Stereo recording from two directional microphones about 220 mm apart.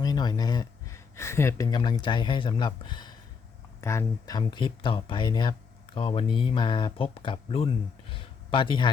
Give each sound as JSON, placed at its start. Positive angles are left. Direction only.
{"t": 0.0, "sound": "speech", "side_deg": 20}